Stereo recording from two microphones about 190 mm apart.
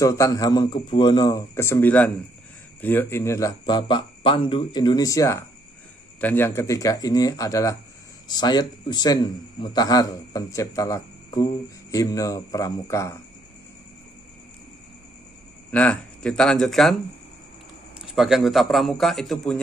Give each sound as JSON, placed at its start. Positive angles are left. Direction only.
{"t": 0.0, "sound": "speech", "side_deg": 15}
{"t": 15.7, "sound": "a man's voice", "side_deg": 5}
{"t": 18.0, "sound": "a man's voice", "side_deg": 0}